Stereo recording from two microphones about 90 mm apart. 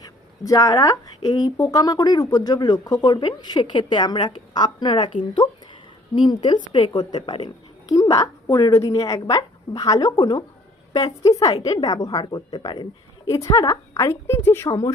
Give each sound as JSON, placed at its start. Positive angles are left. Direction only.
{"t": 0.0, "sound": "a woman's voice", "side_deg": 45}
{"t": 7.2, "sound": "a woman's voice", "side_deg": 65}
{"t": 7.9, "sound": "a woman's voice", "side_deg": 40}
{"t": 12.2, "sound": "speech", "side_deg": 55}
{"t": 13.2, "sound": "a woman's voice", "side_deg": 40}
{"t": 14.7, "sound": "a woman's voice", "side_deg": 40}